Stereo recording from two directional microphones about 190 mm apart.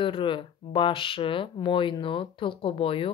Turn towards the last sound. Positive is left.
turn(degrees=30)  # may be behind; listen again after turning